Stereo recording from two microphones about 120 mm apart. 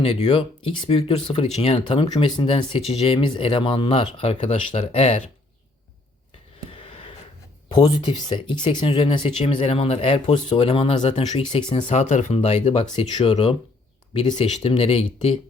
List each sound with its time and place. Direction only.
0.0 s speech: 60° left (ahead or behind)
1.8 s speech: 50° left (ahead or behind)
6.7 s a sound: 55° left (ahead or behind)
7.7 s speech: 35° left (ahead or behind)
9.4 s speech: 60° left (ahead or behind)
11.9 s speech: 85° left; by 15.4 s 55° left (ahead or behind)